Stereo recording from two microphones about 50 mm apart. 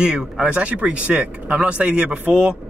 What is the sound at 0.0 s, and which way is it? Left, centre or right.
Speech, centre.